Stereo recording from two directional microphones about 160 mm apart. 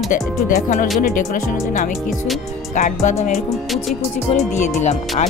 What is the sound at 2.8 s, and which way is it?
Speech, 50° left (ahead or behind).